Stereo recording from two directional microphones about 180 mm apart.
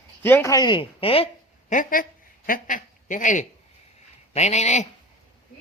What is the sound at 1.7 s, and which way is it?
Speech, 50° left (ahead or behind).